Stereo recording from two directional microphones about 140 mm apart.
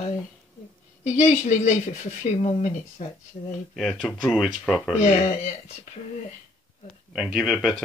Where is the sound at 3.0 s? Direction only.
60° left (ahead or behind).